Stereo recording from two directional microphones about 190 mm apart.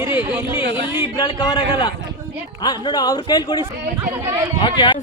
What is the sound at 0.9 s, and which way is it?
A man's voice, 25° left (ahead or behind).